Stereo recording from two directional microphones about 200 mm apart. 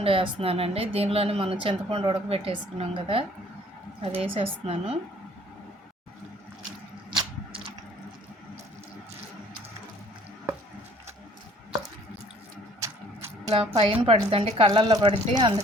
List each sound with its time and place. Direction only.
0.0 s speech: 30° right (ahead or behind)
13.5 s speech: 30° right (ahead or behind)